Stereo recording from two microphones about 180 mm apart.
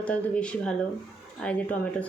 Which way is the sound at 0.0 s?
5° left (ahead or behind).